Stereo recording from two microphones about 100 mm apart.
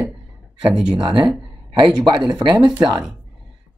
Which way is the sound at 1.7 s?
50° right (ahead or behind).